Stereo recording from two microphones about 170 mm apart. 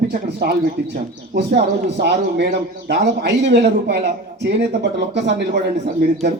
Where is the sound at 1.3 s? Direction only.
85° right.